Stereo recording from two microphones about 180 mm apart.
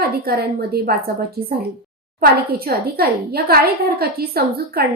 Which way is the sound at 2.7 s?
60° right (ahead or behind).